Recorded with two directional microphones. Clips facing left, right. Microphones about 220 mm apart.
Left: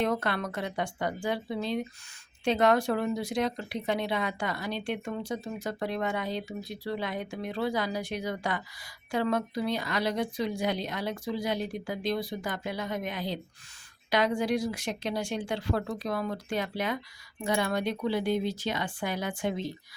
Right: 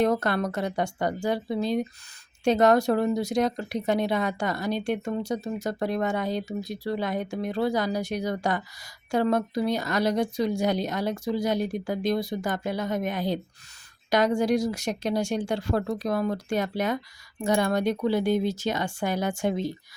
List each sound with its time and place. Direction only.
0.0 s a woman's voice: 40° right (ahead or behind)